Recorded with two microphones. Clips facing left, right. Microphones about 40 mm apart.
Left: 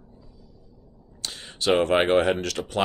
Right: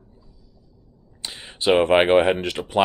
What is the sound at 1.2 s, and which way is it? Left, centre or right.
Speech, centre.